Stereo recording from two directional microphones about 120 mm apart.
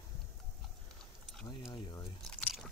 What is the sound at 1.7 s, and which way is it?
Speech, 35° left (ahead or behind).